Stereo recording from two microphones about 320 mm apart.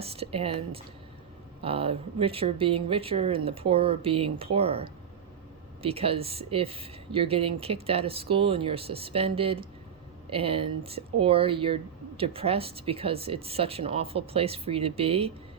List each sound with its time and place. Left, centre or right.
0.0 s speech: centre